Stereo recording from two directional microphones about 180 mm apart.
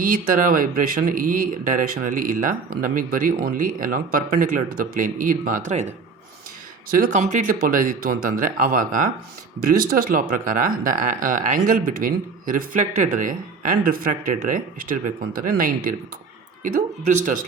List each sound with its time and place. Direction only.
0.0 s speech: 50° right (ahead or behind)
6.9 s speech: 45° right (ahead or behind)